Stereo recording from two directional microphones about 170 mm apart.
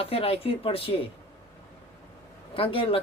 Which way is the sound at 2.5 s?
30° left (ahead or behind).